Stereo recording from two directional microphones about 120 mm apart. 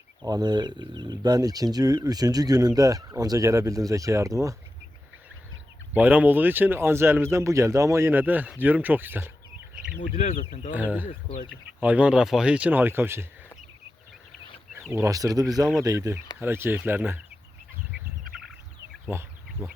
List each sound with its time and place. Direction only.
0.3 s speech: 35° right (ahead or behind)
5.9 s speech: 15° right (ahead or behind)
10.2 s speech: 65° left (ahead or behind)
10.8 s speech: 15° right (ahead or behind)
14.9 s speech: 30° right (ahead or behind)
19.6 s speech: 15° right (ahead or behind)